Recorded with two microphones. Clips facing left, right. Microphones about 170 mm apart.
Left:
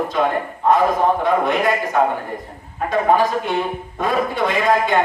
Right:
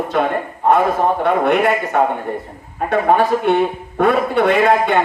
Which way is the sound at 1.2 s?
65° right (ahead or behind).